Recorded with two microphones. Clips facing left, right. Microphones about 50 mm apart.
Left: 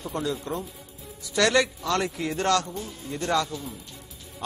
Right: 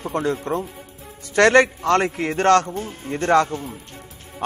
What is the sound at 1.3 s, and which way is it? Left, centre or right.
A man's voice, right.